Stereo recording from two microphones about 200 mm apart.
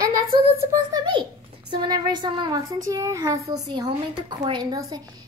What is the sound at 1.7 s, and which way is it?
A woman's voice, 20° right (ahead or behind).